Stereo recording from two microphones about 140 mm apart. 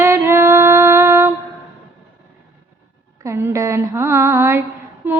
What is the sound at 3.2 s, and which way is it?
Mantra, 20° right (ahead or behind).